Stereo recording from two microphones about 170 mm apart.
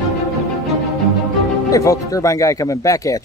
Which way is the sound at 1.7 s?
20° left (ahead or behind).